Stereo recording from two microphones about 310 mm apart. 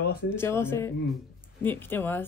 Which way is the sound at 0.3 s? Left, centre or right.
Centre.